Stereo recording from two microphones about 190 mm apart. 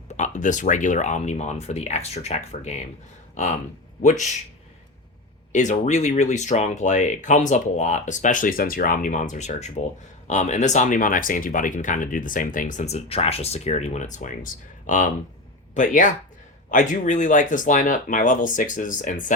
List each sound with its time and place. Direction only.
0.1 s speech: 40° left (ahead or behind)
5.5 s speech: 40° left (ahead or behind)